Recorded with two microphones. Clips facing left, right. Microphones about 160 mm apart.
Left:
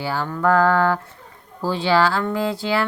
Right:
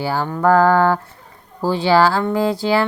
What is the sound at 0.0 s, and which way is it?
Speech, 30° right (ahead or behind).